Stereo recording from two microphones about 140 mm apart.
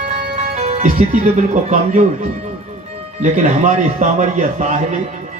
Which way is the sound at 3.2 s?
55° right (ahead or behind).